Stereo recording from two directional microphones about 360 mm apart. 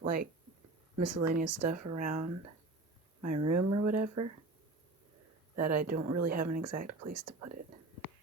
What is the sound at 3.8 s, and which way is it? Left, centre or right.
Speech, right.